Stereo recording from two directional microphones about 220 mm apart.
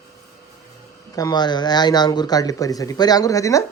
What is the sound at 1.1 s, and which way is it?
Speech, 20° left (ahead or behind).